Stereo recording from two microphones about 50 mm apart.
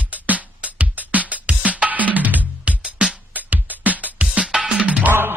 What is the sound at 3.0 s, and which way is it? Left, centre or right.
Music, right.